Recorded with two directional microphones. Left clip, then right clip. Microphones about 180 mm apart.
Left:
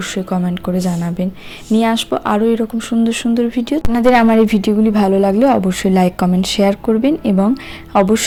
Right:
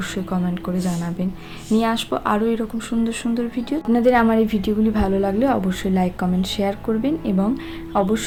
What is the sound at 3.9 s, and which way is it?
A woman's voice, 45° left (ahead or behind).